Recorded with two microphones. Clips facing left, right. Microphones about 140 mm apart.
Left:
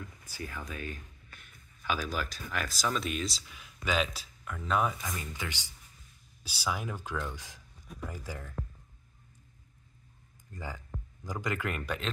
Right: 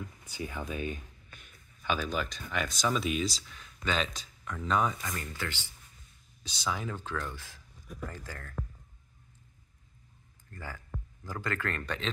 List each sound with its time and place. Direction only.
0.4 s speech: 20° right (ahead or behind)
1.9 s speech: 5° left (ahead or behind)
10.5 s speech: 15° left (ahead or behind)